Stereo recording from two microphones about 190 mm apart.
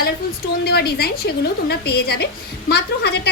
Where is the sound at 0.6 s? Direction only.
55° left (ahead or behind).